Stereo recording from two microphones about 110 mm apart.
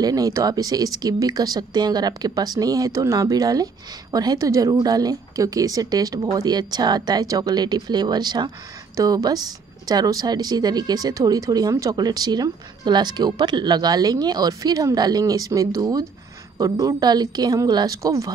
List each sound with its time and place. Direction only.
0.0 s speech: 35° right (ahead or behind)